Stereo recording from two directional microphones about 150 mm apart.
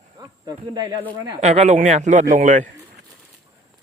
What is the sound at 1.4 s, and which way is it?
Speech, 45° right (ahead or behind).